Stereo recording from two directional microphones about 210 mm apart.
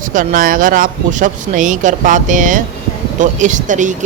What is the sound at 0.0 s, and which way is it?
Speech, 40° right (ahead or behind).